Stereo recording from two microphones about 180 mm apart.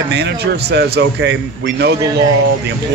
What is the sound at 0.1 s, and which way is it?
A man's voice, 70° right (ahead or behind).